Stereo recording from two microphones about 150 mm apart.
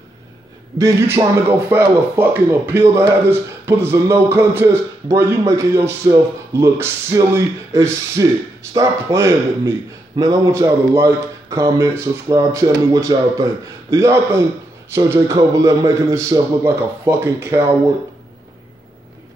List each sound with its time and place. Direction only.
0.7 s a man's voice: 20° right (ahead or behind)